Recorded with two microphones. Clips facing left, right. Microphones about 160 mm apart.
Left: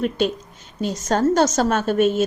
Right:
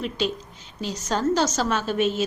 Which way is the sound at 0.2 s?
50° left (ahead or behind).